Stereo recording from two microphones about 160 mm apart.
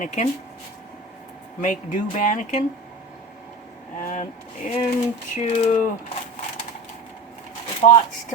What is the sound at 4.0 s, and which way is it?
Speech, 55° left (ahead or behind).